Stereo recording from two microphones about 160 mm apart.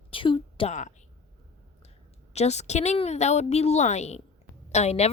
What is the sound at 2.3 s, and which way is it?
A woman's voice, 45° left (ahead or behind).